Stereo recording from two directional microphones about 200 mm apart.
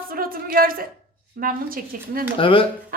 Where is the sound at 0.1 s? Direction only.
45° right (ahead or behind).